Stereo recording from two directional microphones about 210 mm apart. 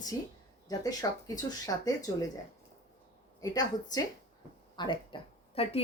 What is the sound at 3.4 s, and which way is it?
Speech, 15° left (ahead or behind).